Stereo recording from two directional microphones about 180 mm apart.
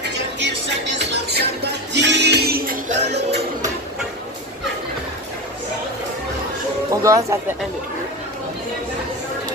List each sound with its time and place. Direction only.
1.1 s music: 70° right (ahead or behind)
2.9 s music: 70° right (ahead or behind)
6.9 s speech: 20° right (ahead or behind)